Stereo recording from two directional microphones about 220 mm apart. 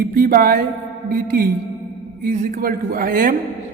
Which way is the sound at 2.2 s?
35° right (ahead or behind).